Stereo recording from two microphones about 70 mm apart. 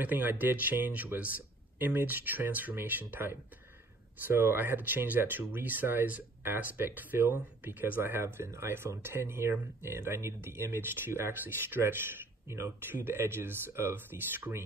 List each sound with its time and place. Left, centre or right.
0.0 s speech: right